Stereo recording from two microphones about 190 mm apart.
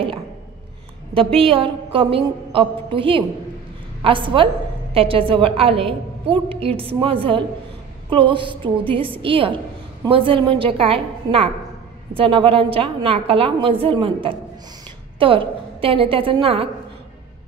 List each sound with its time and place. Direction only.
1.1 s a woman's voice: 30° right (ahead or behind)